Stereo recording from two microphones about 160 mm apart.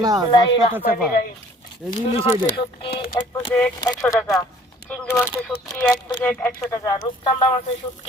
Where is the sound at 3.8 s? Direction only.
20° left (ahead or behind).